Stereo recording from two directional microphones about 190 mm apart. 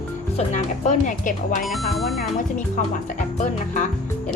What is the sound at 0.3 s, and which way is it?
A woman's voice, 40° left (ahead or behind).